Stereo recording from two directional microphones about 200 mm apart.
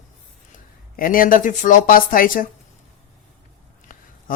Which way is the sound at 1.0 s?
45° left (ahead or behind).